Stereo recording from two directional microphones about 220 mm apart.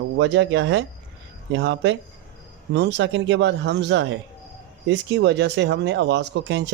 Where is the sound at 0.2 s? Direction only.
55° right (ahead or behind).